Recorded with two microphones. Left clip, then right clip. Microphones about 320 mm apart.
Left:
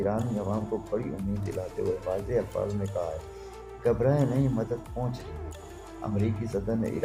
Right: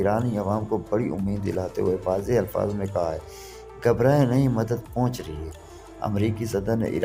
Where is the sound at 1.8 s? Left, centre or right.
Right.